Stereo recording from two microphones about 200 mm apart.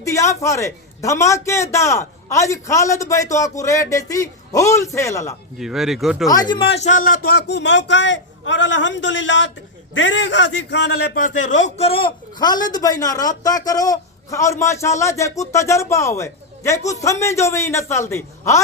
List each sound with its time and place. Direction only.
0.0 s a man's voice: 15° left (ahead or behind)
5.5 s speech: centre (ahead or behind)
6.2 s a man's voice: 20° left (ahead or behind)